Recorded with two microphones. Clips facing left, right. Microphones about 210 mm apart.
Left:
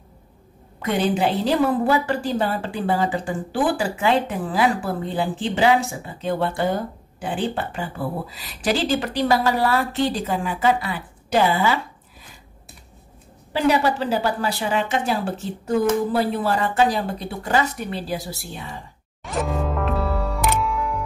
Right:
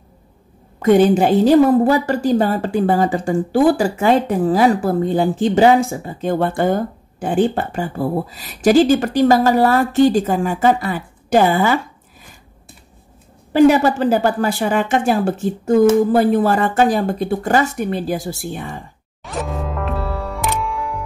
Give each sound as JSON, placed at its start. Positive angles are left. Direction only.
{"t": 0.8, "sound": "a woman's voice", "side_deg": -45}
{"t": 13.5, "sound": "a woman's voice", "side_deg": -50}
{"t": 19.2, "sound": "music", "side_deg": 0}